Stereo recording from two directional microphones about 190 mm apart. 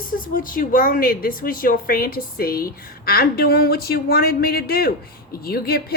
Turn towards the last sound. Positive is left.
turn(degrees=55)  # may be behind; listen again after turning